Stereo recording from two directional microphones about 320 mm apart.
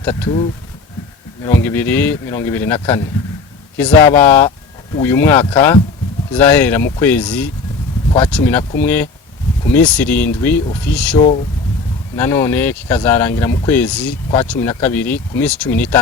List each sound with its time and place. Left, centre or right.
0.0 s speech: centre
1.5 s speech: centre